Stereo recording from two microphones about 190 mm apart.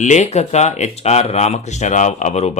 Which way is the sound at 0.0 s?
40° left (ahead or behind).